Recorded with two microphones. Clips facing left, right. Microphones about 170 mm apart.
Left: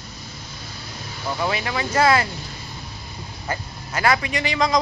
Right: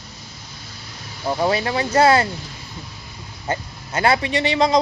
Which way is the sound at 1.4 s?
35° right (ahead or behind).